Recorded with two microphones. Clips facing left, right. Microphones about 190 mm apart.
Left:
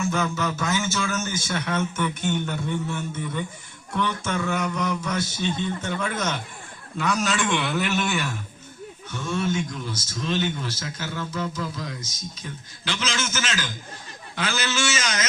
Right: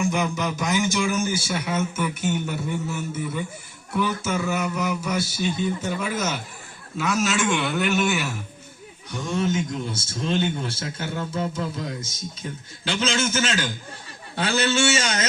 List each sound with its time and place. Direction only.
0.0 s a man's voice: 15° right (ahead or behind)
9.1 s a man's voice: 20° right (ahead or behind)